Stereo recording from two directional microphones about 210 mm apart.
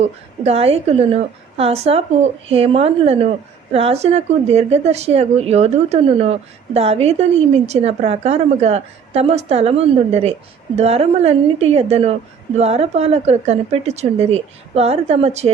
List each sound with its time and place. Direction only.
0.0 s a woman's voice: 30° right (ahead or behind)